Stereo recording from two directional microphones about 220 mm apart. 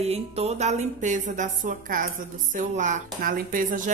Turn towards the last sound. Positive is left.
turn(degrees=-35)  # may be behind; listen again after turning